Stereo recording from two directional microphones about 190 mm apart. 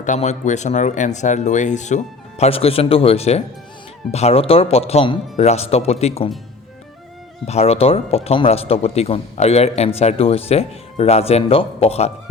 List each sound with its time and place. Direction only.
0.0 s speech: 40° left (ahead or behind)
7.4 s speech: 35° left (ahead or behind)